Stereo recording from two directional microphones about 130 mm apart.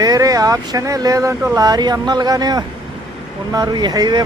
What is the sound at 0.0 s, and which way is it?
Speech, 30° right (ahead or behind).